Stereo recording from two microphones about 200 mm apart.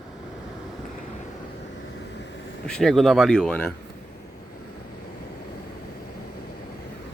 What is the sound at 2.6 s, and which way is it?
Speech, 5° left (ahead or behind).